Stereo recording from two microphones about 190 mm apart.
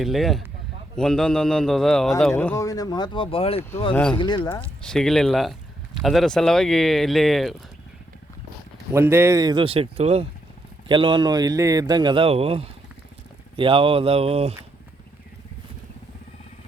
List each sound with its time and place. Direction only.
0.0 s speech: centre (ahead or behind)
2.3 s speech: 10° left (ahead or behind); by 3.6 s 30° left (ahead or behind)
3.9 s speech: 10° left (ahead or behind)
4.2 s speech: 25° left (ahead or behind)
4.8 s speech: 5° left (ahead or behind)
8.9 s a man's voice: 15° right (ahead or behind); by 14.5 s 35° right (ahead or behind)